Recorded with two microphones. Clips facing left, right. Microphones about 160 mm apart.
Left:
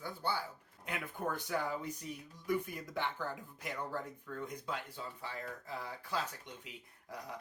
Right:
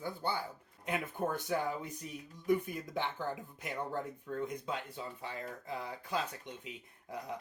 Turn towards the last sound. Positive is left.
turn(degrees=-25)  # may be behind; listen again after turning